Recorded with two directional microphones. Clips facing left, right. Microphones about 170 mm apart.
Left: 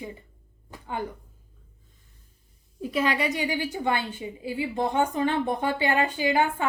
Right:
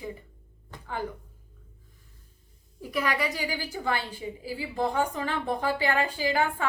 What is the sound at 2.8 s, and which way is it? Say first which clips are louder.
A woman's voice: left 3 dB; 20° left (ahead or behind).